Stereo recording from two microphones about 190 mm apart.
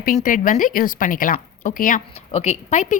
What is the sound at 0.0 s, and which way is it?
A woman's voice, 45° left (ahead or behind).